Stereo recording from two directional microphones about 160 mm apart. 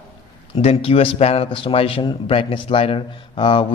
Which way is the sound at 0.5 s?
35° left (ahead or behind).